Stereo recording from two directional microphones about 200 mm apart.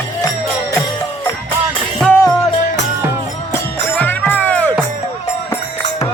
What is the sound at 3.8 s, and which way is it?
Music, 10° left (ahead or behind).